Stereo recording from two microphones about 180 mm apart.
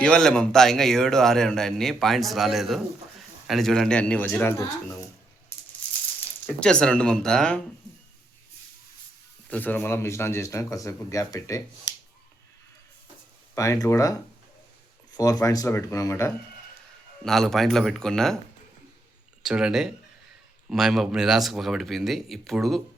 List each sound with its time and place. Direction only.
0.0 s a man's voice: 5° left (ahead or behind)
6.4 s a man's voice: 10° left (ahead or behind)
9.5 s speech: 10° left (ahead or behind)
13.6 s speech: 15° left (ahead or behind)
17.2 s a man's voice: centre (ahead or behind)
19.4 s a man's voice: 5° right (ahead or behind)